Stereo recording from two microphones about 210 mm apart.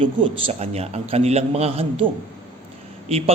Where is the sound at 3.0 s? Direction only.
30° right (ahead or behind).